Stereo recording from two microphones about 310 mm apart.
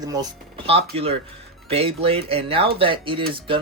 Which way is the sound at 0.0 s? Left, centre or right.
Centre.